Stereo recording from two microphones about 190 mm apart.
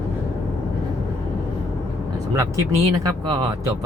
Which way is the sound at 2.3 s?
15° right (ahead or behind).